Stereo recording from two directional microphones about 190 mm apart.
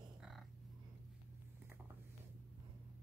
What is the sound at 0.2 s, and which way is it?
Crow, centre (ahead or behind).